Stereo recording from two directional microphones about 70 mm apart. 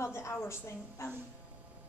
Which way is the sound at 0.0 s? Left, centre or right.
Left.